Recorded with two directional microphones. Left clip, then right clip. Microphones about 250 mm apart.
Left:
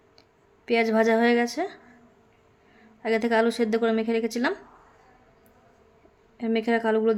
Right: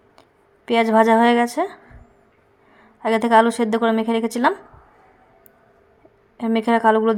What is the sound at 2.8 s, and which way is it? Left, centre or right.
Speech, centre.